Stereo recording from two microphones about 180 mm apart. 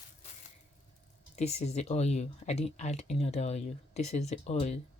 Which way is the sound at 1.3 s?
40° left (ahead or behind).